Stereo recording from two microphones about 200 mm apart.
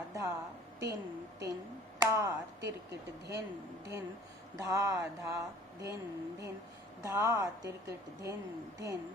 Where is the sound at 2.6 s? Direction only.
60° right (ahead or behind).